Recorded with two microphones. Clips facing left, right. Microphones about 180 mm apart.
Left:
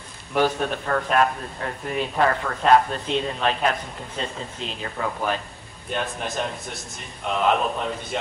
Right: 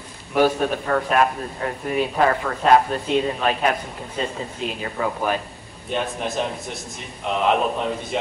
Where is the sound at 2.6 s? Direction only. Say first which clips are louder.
Right 1 dB; 5° right (ahead or behind).